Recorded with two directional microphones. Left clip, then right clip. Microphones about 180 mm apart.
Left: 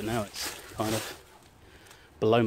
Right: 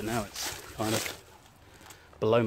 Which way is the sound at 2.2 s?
20° left (ahead or behind).